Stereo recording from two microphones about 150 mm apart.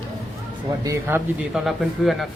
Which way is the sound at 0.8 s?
20° right (ahead or behind).